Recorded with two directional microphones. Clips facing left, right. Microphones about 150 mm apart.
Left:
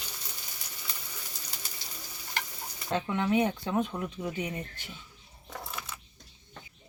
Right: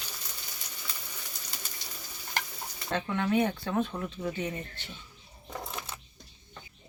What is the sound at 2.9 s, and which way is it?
Speech, 15° left (ahead or behind).